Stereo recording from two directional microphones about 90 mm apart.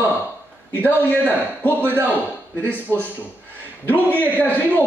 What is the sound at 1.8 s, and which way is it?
Speech, 20° right (ahead or behind).